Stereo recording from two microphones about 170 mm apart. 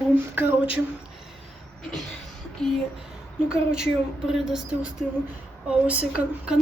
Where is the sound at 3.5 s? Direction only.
5° right (ahead or behind).